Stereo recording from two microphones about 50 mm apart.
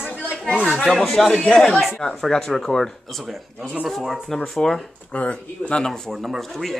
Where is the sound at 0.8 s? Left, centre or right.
Centre.